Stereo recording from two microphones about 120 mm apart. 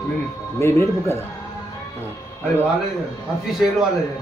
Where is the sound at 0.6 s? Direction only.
20° left (ahead or behind).